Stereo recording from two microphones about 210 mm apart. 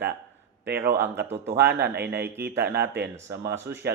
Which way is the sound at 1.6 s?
50° right (ahead or behind).